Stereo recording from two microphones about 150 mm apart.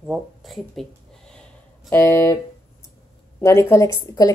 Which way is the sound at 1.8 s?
15° left (ahead or behind).